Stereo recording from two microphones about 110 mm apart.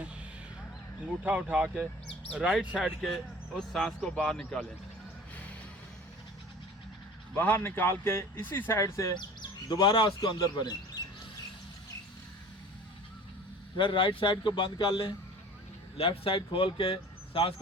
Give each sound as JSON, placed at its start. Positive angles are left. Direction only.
{"t": 1.2, "sound": "speech", "side_deg": -15}
{"t": 7.3, "sound": "speech", "side_deg": 20}
{"t": 9.1, "sound": "speech", "side_deg": 40}
{"t": 13.7, "sound": "speech", "side_deg": 50}
{"t": 16.0, "sound": "speech", "side_deg": 55}